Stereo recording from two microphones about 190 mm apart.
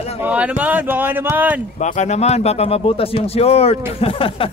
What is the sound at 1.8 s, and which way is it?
Speech, 40° left (ahead or behind).